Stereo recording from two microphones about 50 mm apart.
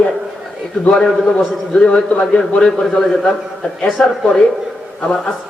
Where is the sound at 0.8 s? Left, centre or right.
Centre.